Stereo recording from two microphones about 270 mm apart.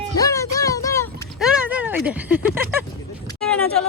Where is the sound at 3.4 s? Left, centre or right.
Centre.